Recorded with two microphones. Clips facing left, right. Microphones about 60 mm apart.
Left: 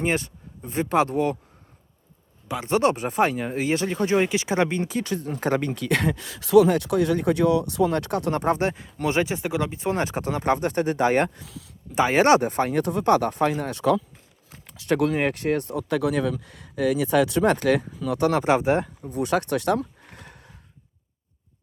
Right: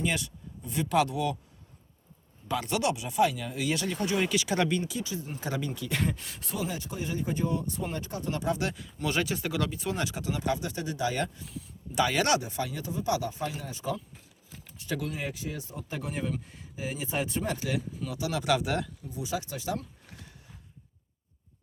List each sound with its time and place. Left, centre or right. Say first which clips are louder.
0.0 s speech: left 6 dB; left
2.6 s speech: left 11 dB; left
4.9 s speech: left 8 dB; left
8.4 s speech: left 7 dB; left
11.3 s speech: left 1 dB; left
11.9 s speech: left 8 dB; left
12.4 s speech: left 11 dB; left
19.0 s a sound: left 10 dB; left